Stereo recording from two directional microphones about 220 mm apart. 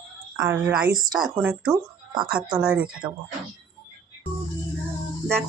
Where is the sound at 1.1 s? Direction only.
20° right (ahead or behind).